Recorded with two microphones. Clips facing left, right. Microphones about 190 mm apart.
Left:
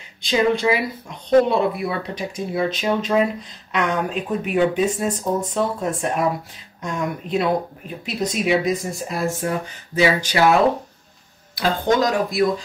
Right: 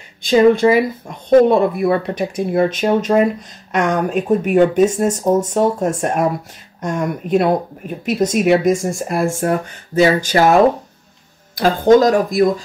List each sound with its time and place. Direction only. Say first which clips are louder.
0.2 s speech: right 8 dB; 50° right (ahead or behind)